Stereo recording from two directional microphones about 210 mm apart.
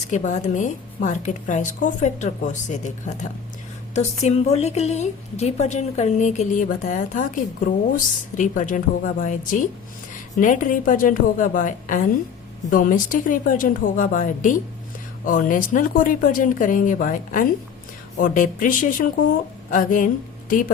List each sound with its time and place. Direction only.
0.1 s a woman's voice: 35° left (ahead or behind)